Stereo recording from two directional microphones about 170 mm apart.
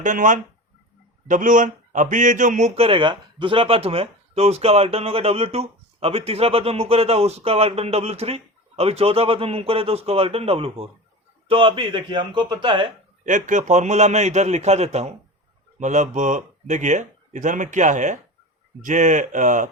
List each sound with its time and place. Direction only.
0.0 s speech: 50° right (ahead or behind); by 12.9 s 30° right (ahead or behind)
13.2 s speech: 50° right (ahead or behind)